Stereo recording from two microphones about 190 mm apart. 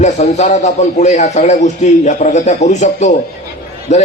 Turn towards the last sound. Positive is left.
turn(degrees=35)  # may be behind; listen again after turning